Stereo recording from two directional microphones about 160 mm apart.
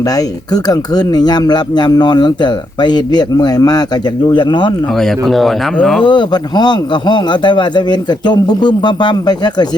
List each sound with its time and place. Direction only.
0.0 s speech: 20° left (ahead or behind)
4.9 s speech: centre (ahead or behind)
6.0 s speech: 30° left (ahead or behind)